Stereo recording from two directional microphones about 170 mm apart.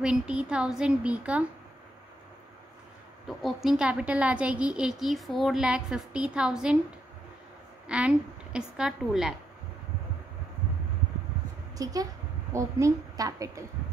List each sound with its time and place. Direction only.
0.0 s a woman's voice: 5° right (ahead or behind)
3.3 s a woman's voice: centre (ahead or behind)
7.8 s a woman's voice: 5° right (ahead or behind)
11.8 s a woman's voice: 20° right (ahead or behind)